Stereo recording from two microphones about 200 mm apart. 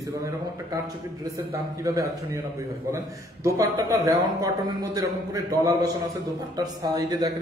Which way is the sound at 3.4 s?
15° right (ahead or behind).